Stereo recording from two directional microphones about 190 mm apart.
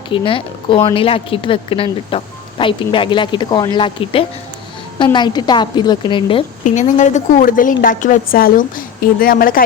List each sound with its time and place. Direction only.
0.1 s speech: 25° left (ahead or behind)
6.7 s a woman's voice: 40° left (ahead or behind)